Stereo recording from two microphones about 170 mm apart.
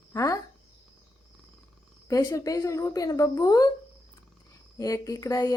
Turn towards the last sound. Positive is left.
turn(degrees=20)  # may be behind; listen again after turning